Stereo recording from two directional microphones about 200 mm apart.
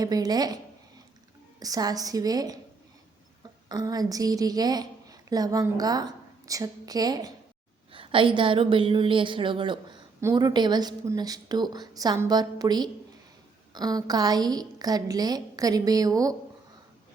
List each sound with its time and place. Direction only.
0.0 s a woman's voice: 20° right (ahead or behind)
3.7 s a woman's voice: 20° right (ahead or behind)
7.9 s a sound: 25° right (ahead or behind)
8.4 s a woman's voice: 25° right (ahead or behind)